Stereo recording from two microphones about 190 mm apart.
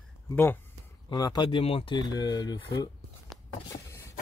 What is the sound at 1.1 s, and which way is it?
Speech, 20° left (ahead or behind).